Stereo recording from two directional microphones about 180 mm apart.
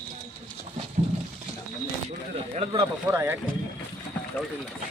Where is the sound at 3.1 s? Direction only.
15° right (ahead or behind).